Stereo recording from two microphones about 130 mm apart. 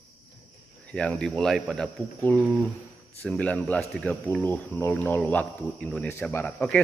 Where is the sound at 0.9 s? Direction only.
5° left (ahead or behind).